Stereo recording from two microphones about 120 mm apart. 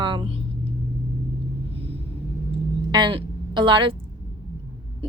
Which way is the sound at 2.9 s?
45° right (ahead or behind).